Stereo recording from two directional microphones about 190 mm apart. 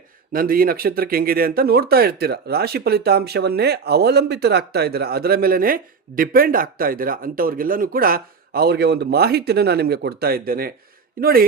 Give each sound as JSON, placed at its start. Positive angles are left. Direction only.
{"t": 0.3, "sound": "speech", "side_deg": -50}